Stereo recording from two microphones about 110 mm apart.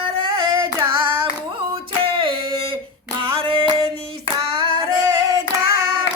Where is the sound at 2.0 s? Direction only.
55° right (ahead or behind).